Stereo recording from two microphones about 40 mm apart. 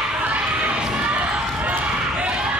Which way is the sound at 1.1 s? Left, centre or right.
Right.